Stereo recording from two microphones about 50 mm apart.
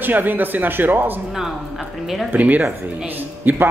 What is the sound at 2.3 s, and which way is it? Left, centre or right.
A man's voice, right.